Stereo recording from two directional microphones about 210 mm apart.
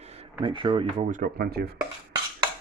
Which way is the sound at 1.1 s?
40° right (ahead or behind).